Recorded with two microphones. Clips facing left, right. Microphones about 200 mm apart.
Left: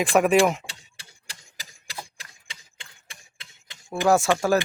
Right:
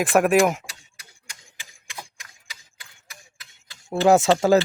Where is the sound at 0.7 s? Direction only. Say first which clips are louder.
Left 1 dB; 30° left (ahead or behind).